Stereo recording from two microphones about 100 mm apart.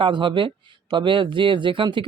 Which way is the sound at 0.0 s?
55° right (ahead or behind).